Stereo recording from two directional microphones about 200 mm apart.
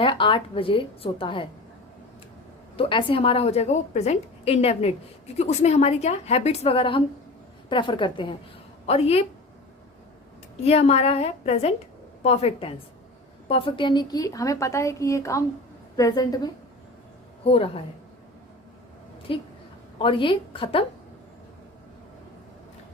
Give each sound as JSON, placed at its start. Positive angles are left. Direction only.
{"t": 0.0, "sound": "a woman's voice", "side_deg": 25}
{"t": 2.7, "sound": "a woman's voice", "side_deg": 30}
{"t": 10.6, "sound": "a woman's voice", "side_deg": 30}
{"t": 17.4, "sound": "a woman's voice", "side_deg": 30}
{"t": 19.3, "sound": "a woman's voice", "side_deg": 25}